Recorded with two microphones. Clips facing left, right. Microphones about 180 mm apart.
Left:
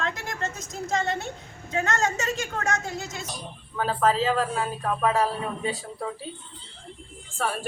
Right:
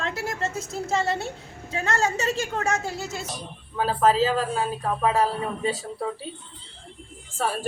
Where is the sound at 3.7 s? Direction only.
5° right (ahead or behind).